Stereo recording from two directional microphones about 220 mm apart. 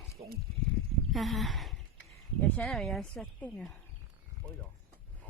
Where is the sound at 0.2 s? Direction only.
25° right (ahead or behind).